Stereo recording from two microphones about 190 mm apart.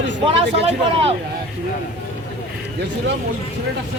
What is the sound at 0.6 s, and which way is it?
Speech, 30° right (ahead or behind).